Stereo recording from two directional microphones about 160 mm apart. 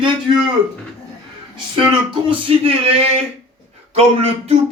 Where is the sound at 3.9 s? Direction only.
40° right (ahead or behind).